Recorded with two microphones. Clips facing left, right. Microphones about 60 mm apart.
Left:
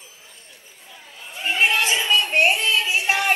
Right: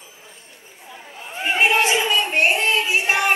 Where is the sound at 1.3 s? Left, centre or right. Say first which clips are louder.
Right 2 dB; right.